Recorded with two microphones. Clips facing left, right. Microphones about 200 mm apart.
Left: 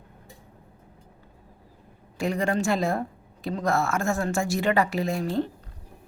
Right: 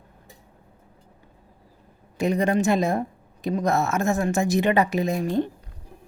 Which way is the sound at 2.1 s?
20° right (ahead or behind).